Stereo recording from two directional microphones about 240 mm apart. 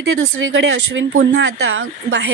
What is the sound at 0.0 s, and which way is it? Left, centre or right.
A woman's voice, right.